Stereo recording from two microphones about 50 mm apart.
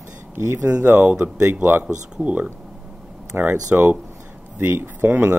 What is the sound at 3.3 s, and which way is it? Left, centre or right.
Speech, right.